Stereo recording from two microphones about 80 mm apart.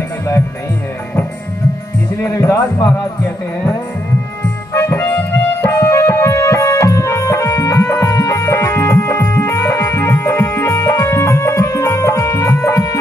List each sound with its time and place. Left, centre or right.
2.3 s a man's voice: left
4.7 s music: left